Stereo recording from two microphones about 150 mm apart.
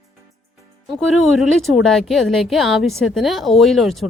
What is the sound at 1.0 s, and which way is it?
Speech, centre (ahead or behind).